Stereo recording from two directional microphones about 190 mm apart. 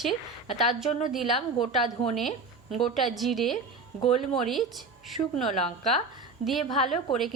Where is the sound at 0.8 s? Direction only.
35° left (ahead or behind).